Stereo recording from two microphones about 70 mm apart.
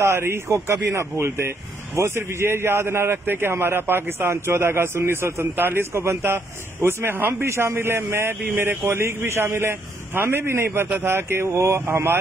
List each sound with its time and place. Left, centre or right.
0.0 s a man's voice: right